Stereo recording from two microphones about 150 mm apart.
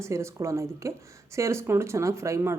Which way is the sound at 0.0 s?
20° right (ahead or behind).